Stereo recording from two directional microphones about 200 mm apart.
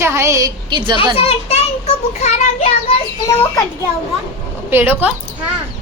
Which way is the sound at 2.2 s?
30° left (ahead or behind).